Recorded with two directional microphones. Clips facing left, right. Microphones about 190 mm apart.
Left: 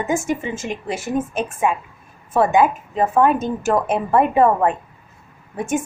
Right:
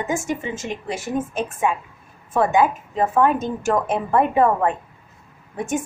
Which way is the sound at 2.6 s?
20° left (ahead or behind).